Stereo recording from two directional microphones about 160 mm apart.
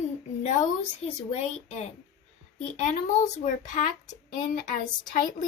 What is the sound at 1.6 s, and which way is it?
A child's voice, 45° left (ahead or behind).